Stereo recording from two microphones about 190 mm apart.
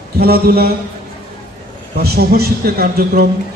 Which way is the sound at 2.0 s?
55° right (ahead or behind).